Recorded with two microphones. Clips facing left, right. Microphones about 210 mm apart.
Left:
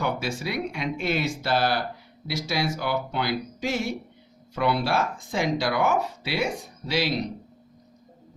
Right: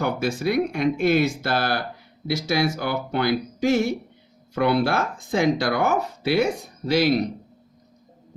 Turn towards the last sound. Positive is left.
turn(degrees=-50)  # may be behind; listen again after turning